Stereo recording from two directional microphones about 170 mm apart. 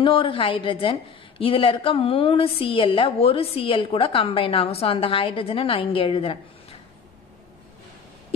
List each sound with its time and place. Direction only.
0.0 s a woman's voice: 30° left (ahead or behind)